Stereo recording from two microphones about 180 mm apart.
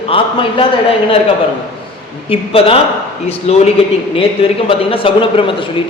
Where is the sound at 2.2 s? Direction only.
30° left (ahead or behind).